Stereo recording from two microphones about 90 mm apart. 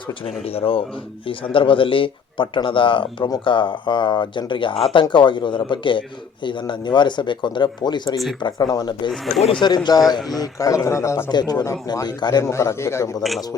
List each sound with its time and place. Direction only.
0.4 s speech: 90° left
1.3 s speech: 75° left (ahead or behind)
4.9 s speech: 60° left (ahead or behind)
10.2 s speech: centre (ahead or behind)
10.4 s speech: 40° left (ahead or behind)
11.3 s speech: 50° left (ahead or behind)
12.5 s speech: 35° left (ahead or behind)